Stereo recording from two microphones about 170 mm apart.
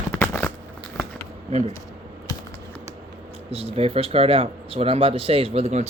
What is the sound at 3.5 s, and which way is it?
Speech, 35° right (ahead or behind).